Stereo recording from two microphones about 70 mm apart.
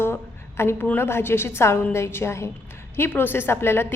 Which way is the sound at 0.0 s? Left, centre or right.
Left.